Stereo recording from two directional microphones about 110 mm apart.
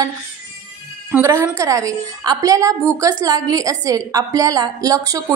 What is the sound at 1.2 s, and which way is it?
A woman's voice, 30° right (ahead or behind).